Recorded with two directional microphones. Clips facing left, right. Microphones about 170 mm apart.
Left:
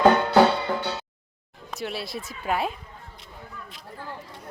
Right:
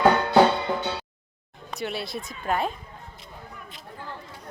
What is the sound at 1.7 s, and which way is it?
Speech, centre (ahead or behind).